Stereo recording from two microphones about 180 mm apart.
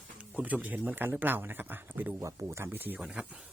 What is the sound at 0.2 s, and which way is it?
Speech, 10° right (ahead or behind).